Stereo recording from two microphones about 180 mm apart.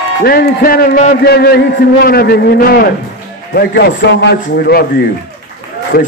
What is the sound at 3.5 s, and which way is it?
A man's voice, 70° left (ahead or behind).